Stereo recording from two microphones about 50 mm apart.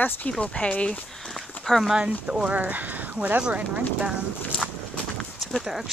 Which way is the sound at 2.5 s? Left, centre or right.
Right.